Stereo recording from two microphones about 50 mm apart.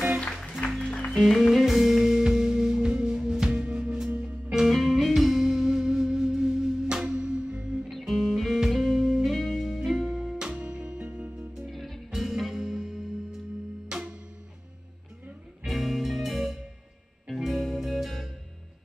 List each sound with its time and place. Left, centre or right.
0.6 s music: left
1.3 s music: centre
8.0 s music: centre
10.4 s music: right
11.3 s music: centre
11.7 s music: centre
13.8 s music: centre
15.6 s music: centre